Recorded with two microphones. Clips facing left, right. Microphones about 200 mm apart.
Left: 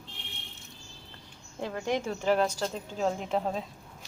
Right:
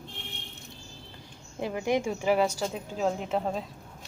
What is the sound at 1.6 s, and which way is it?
Speech, 15° right (ahead or behind).